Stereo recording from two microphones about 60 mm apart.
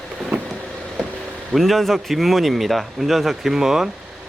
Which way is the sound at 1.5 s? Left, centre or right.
Centre.